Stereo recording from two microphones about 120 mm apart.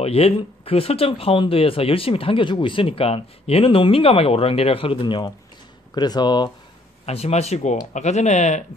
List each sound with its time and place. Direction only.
0.0 s speech: 60° left (ahead or behind); by 6.5 s 35° left (ahead or behind)
7.1 s speech: 60° left (ahead or behind)